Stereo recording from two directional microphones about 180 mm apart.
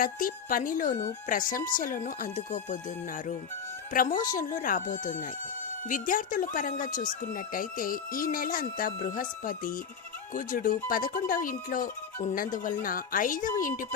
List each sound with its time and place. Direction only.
0.0 s speech: 50° left (ahead or behind)
3.9 s speech: 50° left (ahead or behind)